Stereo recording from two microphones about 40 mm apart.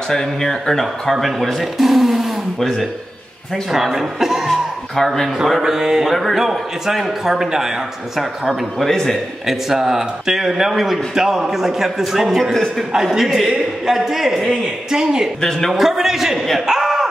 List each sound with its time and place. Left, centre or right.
0.1 s speech: centre
2.6 s speech: centre
3.7 s a man's voice: centre
4.5 s speech: centre
5.6 s a man's voice: centre
9.5 s a man's voice: centre
16.4 s a sound: centre